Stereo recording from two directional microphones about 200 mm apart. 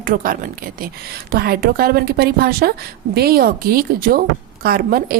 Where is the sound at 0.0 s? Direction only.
45° right (ahead or behind).